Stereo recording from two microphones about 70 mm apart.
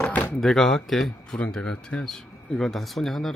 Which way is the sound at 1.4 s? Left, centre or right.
Centre.